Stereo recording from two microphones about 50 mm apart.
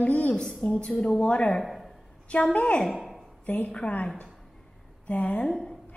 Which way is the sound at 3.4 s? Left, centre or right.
Left.